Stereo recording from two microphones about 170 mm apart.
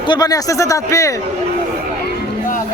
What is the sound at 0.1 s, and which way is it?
Speech, 20° left (ahead or behind).